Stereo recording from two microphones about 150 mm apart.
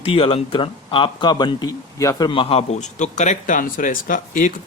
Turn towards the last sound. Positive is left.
turn(degrees=60)  # may be behind; listen again after turning